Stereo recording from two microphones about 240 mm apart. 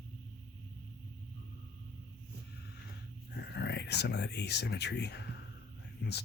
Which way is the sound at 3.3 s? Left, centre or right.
Left.